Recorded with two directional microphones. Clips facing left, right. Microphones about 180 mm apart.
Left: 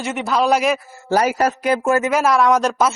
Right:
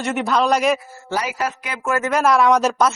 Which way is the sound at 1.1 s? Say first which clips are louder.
Left 7 dB; 45° left (ahead or behind).